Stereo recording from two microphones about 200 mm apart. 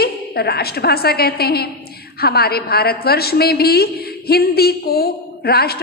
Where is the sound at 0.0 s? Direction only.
50° left (ahead or behind).